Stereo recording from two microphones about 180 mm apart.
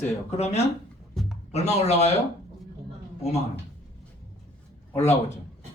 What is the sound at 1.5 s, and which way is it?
Speech, 35° left (ahead or behind).